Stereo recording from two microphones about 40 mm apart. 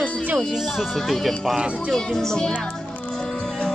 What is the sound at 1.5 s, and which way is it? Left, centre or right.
Speech, right.